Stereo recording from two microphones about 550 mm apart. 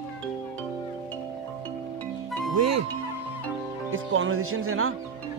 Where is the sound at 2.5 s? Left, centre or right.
Right.